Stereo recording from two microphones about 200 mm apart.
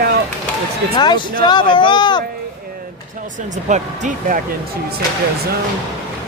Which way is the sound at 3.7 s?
40° right (ahead or behind).